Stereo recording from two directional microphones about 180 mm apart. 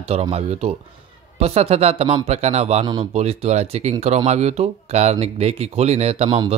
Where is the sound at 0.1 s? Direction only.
35° right (ahead or behind).